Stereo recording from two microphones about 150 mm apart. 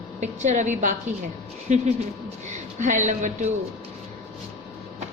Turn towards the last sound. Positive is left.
turn(degrees=-50)  # may be behind; listen again after turning